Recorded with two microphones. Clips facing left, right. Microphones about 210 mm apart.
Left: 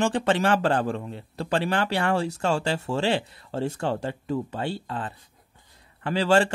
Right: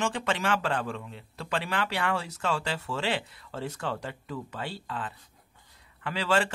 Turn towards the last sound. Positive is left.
turn(degrees=30)  # may be behind; listen again after turning